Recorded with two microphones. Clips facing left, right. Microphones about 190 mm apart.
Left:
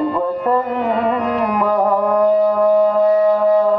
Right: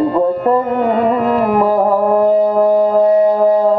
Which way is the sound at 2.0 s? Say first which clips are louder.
Right 1 dB; 45° right (ahead or behind).